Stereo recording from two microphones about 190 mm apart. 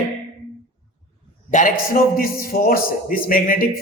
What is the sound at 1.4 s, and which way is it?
A man's voice, 40° left (ahead or behind).